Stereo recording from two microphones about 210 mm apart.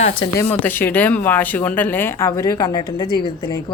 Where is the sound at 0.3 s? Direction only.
10° left (ahead or behind).